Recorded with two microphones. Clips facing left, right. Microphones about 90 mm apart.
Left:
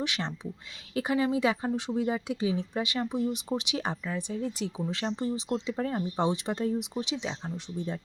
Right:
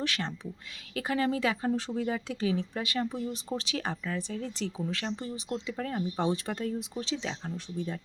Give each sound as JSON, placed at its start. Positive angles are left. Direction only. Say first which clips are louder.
{"t": 0.0, "sound": "speech", "louder": "left 1 dB", "side_deg": 20}
{"t": 4.9, "sound": "speech", "louder": "left 4 dB", "side_deg": 25}